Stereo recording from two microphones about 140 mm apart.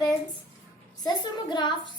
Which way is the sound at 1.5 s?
35° left (ahead or behind).